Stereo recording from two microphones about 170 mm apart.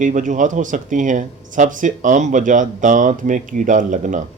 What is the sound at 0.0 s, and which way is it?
Speech, 45° right (ahead or behind).